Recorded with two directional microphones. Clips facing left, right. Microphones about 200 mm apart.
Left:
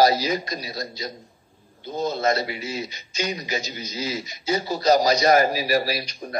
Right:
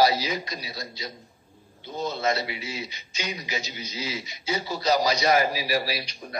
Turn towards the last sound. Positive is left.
turn(degrees=45)  # may be behind; listen again after turning